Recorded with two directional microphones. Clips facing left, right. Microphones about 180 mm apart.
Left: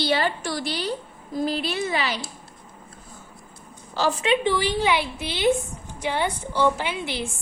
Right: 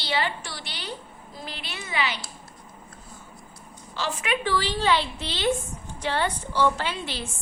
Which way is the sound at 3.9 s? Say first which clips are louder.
Left 7 dB; 40° left (ahead or behind).